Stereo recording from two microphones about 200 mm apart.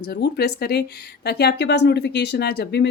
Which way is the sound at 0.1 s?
55° left (ahead or behind).